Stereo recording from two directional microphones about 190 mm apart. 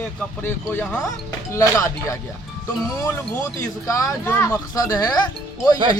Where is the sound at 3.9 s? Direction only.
15° left (ahead or behind).